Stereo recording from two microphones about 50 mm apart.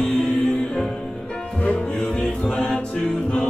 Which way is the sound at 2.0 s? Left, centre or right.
Centre.